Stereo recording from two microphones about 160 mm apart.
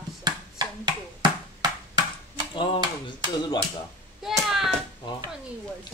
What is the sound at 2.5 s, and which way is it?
Speech, 35° left (ahead or behind).